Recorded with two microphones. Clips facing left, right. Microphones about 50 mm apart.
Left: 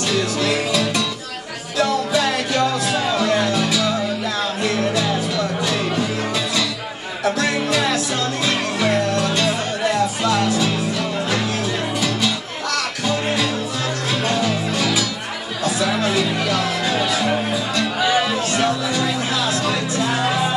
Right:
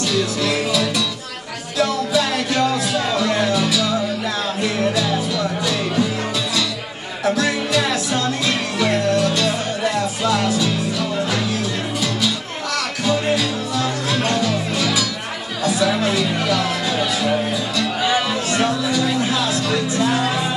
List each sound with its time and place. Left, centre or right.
0.1 s music: centre
3.7 s music: centre
7.5 s music: centre
9.2 s music: centre
10.6 s music: centre
13.0 s music: centre
15.6 s chatter: centre
16.5 s music: centre
17.0 s music: centre
17.3 s music: centre